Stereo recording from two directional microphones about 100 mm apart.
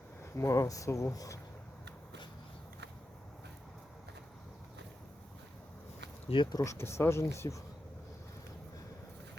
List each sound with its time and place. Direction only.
0.2 s speech: 25° left (ahead or behind)
6.2 s speech: 55° left (ahead or behind)
6.5 s speech: 40° left (ahead or behind)
6.7 s speech: 25° left (ahead or behind)